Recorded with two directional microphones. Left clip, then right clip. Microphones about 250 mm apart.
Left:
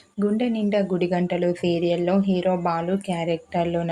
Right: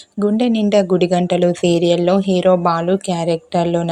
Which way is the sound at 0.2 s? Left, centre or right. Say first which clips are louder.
Right 7 dB; right.